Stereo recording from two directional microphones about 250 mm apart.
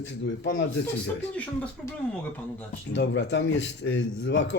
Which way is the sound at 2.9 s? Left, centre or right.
Left.